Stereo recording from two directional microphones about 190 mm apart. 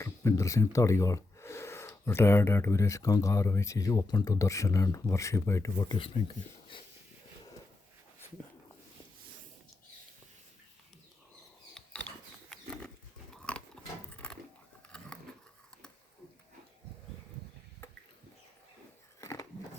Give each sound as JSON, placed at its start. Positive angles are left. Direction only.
{"t": 0.0, "sound": "speech", "side_deg": 15}
{"t": 6.0, "sound": "speech", "side_deg": 25}
{"t": 11.7, "sound": "mechanisms", "side_deg": 5}
{"t": 13.3, "sound": "a sound", "side_deg": 5}
{"t": 19.2, "sound": "biting", "side_deg": 15}